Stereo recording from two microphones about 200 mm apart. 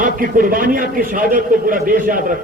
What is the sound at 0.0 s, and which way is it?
A man's voice, 45° right (ahead or behind).